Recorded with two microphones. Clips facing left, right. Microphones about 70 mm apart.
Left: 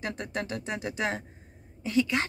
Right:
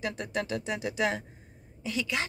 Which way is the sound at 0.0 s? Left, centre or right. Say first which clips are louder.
Right 1 dB; left.